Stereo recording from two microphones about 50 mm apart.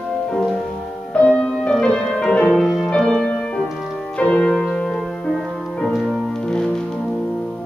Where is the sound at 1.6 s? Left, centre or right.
Centre.